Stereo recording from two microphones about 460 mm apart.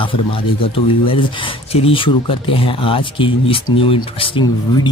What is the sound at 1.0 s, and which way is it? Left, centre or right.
Speech, centre.